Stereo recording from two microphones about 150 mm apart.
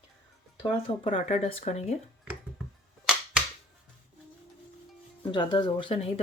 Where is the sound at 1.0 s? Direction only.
40° left (ahead or behind).